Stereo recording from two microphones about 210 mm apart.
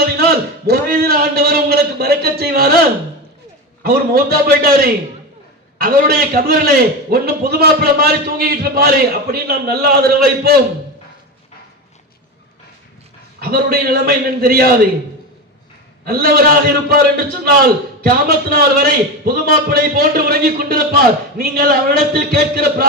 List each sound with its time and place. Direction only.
0.0 s a sound: 50° right (ahead or behind)
3.8 s a man's voice: 45° right (ahead or behind)
13.4 s a man's voice: 45° right (ahead or behind)
16.0 s a man's voice: 45° right (ahead or behind)